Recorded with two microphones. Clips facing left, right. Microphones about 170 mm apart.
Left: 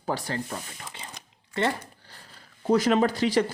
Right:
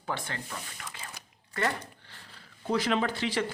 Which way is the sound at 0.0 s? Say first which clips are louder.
Left 6 dB; 35° left (ahead or behind).